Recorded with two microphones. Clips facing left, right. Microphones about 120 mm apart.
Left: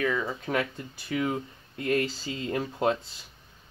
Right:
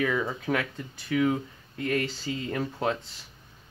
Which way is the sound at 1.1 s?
10° left (ahead or behind).